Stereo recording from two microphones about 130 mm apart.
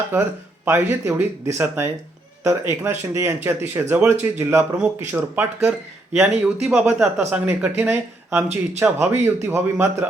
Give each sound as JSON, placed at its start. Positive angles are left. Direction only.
{"t": 0.1, "sound": "speech", "side_deg": -15}